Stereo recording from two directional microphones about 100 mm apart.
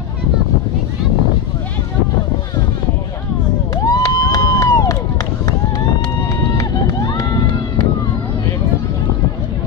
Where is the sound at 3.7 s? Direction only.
35° left (ahead or behind).